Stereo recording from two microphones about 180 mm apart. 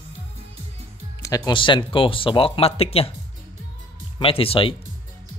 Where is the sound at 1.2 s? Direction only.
20° left (ahead or behind).